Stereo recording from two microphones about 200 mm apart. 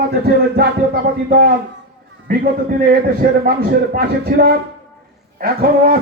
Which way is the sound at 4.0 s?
50° right (ahead or behind).